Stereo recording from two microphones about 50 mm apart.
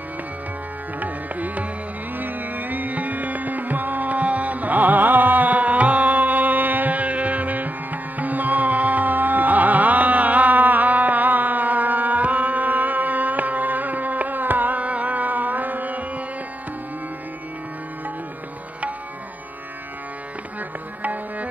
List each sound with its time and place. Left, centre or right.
0.9 s music: right
21.0 s music: right